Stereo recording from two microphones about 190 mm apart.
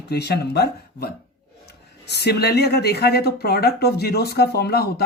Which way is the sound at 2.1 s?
60° left (ahead or behind).